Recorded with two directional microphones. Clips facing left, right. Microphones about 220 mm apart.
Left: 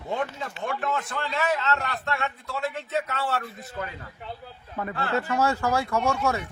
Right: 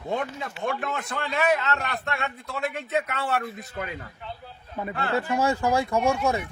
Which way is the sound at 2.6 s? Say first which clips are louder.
Right 2 dB; 20° right (ahead or behind).